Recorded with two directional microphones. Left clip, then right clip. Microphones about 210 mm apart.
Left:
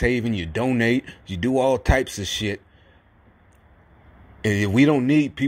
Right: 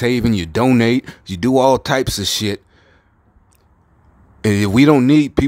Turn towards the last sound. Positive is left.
turn(degrees=-25)  # may be behind; listen again after turning